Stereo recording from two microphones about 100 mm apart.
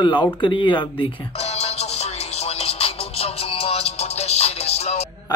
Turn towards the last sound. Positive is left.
turn(degrees=90)